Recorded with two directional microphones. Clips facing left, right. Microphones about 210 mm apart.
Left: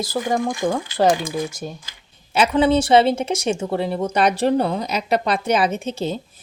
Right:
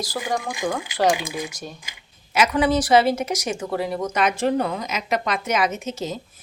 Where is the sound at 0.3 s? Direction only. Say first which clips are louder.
Left 4 dB; 30° left (ahead or behind).